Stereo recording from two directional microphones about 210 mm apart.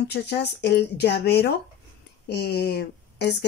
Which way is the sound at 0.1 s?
55° left (ahead or behind).